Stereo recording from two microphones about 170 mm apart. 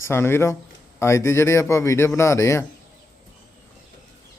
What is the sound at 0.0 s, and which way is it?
A man's voice, 15° left (ahead or behind).